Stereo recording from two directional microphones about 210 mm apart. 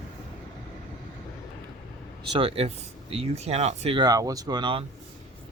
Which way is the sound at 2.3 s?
25° right (ahead or behind).